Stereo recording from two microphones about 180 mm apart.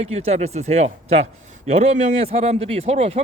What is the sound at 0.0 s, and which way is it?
A man's voice, 35° right (ahead or behind).